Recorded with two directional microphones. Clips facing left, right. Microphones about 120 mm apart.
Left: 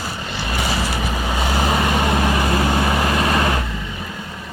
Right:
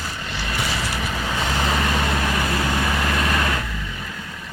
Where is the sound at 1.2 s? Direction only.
15° left (ahead or behind); by 3.6 s 30° left (ahead or behind).